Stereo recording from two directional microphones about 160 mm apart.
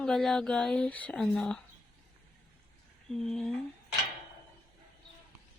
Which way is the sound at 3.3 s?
5° left (ahead or behind).